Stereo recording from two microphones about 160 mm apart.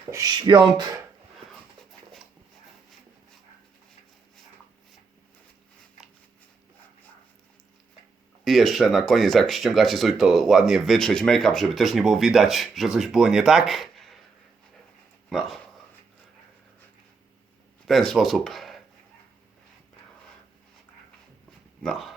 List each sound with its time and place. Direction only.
0.1 s speech: 25° right (ahead or behind)
8.4 s speech: centre (ahead or behind)
15.3 s speech: centre (ahead or behind)
17.8 s speech: centre (ahead or behind)
21.8 s speech: centre (ahead or behind)